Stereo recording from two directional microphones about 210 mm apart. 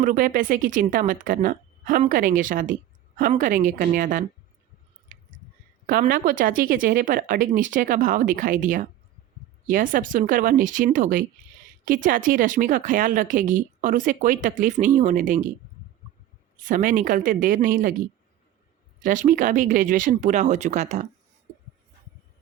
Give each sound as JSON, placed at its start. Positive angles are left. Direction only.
{"t": 0.0, "sound": "speech", "side_deg": -40}
{"t": 5.9, "sound": "speech", "side_deg": -40}
{"t": 16.6, "sound": "speech", "side_deg": -40}
{"t": 19.0, "sound": "speech", "side_deg": -40}